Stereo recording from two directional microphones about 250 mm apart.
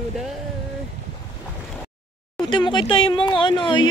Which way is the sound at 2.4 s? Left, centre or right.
Centre.